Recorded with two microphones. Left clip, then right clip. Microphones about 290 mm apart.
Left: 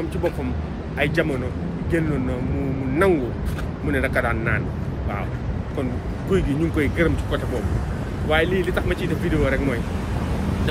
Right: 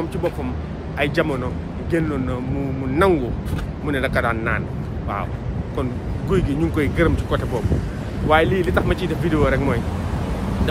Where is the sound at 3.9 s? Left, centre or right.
Centre.